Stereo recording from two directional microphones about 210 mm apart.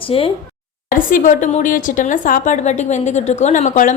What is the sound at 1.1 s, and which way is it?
A woman's voice, 35° left (ahead or behind).